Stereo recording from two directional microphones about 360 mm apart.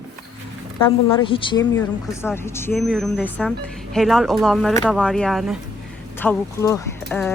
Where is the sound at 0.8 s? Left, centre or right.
Centre.